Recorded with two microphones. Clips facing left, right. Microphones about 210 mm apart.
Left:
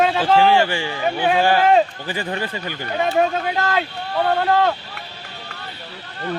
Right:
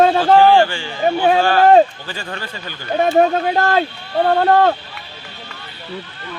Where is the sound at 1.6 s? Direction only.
40° right (ahead or behind).